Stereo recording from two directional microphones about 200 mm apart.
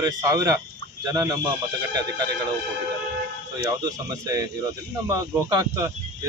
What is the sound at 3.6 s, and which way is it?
Speech, 15° right (ahead or behind).